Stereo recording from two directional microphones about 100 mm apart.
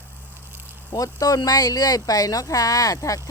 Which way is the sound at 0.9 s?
35° left (ahead or behind).